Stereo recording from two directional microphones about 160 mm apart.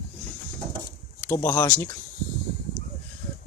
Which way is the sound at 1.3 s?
20° left (ahead or behind).